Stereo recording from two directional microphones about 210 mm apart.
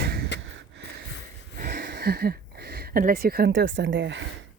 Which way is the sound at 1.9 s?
50° right (ahead or behind).